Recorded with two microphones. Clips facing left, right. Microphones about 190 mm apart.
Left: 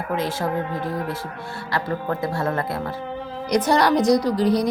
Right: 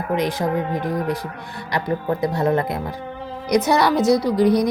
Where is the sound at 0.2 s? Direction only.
15° right (ahead or behind).